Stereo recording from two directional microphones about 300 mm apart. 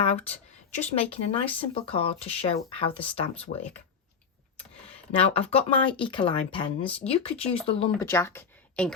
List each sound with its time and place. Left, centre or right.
0.0 s speech: centre
5.4 s speech: centre